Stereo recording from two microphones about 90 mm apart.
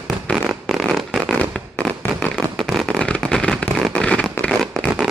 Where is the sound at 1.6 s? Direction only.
10° left (ahead or behind).